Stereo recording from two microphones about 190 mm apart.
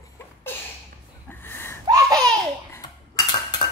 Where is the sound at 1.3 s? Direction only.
10° left (ahead or behind).